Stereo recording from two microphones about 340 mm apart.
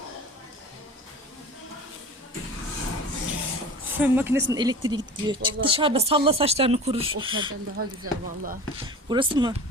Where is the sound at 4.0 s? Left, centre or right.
Centre.